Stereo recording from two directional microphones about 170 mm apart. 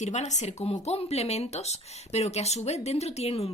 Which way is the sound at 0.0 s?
40° left (ahead or behind).